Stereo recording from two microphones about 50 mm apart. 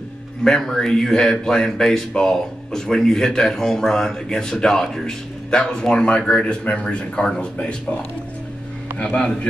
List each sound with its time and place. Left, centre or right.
0.4 s speech: centre
9.1 s speech: centre